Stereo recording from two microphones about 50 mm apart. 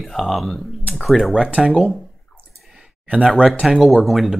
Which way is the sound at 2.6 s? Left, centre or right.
Centre.